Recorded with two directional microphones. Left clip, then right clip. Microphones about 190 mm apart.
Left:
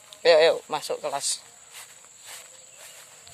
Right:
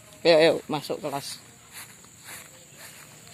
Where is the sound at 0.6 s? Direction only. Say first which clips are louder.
Left 1 dB; 15° left (ahead or behind).